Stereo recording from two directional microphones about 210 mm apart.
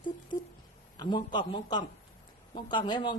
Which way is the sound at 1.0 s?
20° left (ahead or behind).